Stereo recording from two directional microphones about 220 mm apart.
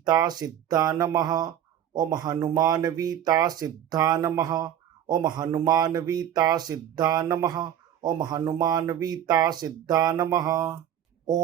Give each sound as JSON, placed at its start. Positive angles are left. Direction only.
{"t": 0.0, "sound": "speech", "side_deg": -15}